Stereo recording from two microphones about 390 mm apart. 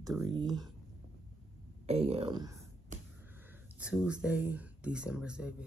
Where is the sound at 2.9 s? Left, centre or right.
Centre.